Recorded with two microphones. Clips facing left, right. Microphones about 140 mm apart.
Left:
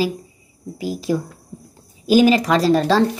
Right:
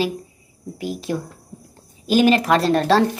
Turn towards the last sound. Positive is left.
turn(degrees=0)  # may be behind; listen again after turning